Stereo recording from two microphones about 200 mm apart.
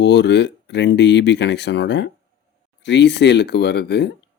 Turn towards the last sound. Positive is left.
turn(degrees=55)  # may be behind; listen again after turning